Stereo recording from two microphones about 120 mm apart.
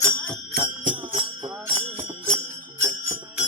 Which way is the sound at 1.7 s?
55° right (ahead or behind).